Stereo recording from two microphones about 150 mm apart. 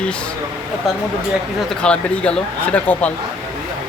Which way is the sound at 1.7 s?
5° left (ahead or behind).